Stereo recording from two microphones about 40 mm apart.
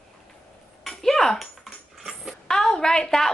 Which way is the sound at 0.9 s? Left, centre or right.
Centre.